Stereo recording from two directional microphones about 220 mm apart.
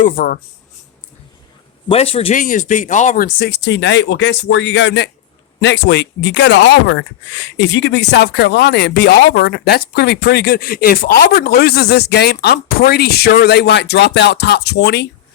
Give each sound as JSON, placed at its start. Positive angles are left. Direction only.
{"t": 0.0, "sound": "speech", "side_deg": 40}
{"t": 1.9, "sound": "speech", "side_deg": 25}